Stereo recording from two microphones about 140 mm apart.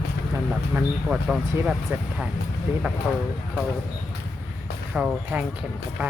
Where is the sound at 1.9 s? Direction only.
15° right (ahead or behind).